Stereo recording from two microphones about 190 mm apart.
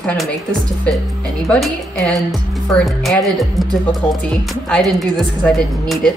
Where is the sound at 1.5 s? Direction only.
5° left (ahead or behind).